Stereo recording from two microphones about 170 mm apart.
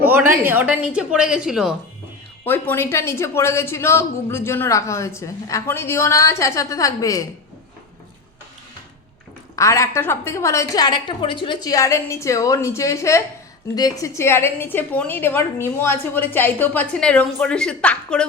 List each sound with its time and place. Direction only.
0.0 s speech: 10° right (ahead or behind)
2.4 s a woman's voice: 10° left (ahead or behind)
9.6 s a woman's voice: 15° left (ahead or behind)